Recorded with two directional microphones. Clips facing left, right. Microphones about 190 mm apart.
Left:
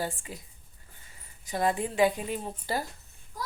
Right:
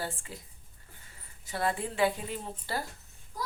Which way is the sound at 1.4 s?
15° left (ahead or behind).